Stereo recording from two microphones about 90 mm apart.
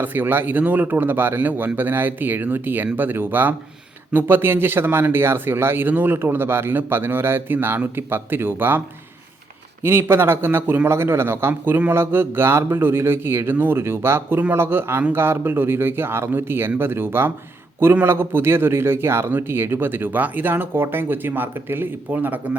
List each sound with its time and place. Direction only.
0.0 s speech: 20° right (ahead or behind)
9.8 s speech: 25° right (ahead or behind)